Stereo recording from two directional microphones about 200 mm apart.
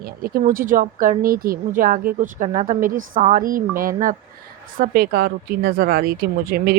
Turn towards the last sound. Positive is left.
turn(degrees=-50)  # may be behind; listen again after turning